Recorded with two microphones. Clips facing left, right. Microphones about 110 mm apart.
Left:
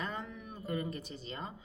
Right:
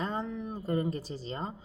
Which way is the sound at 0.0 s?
30° right (ahead or behind).